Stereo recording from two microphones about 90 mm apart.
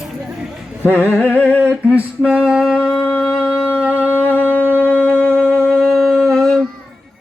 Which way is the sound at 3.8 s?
15° right (ahead or behind).